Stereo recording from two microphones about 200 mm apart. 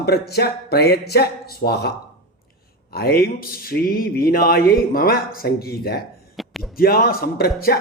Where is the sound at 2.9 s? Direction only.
50° left (ahead or behind).